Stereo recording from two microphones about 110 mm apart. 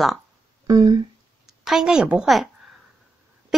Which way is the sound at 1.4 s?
5° right (ahead or behind).